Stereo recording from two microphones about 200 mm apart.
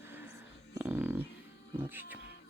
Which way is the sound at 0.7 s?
10° right (ahead or behind).